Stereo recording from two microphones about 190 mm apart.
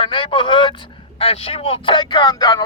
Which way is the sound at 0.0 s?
25° left (ahead or behind).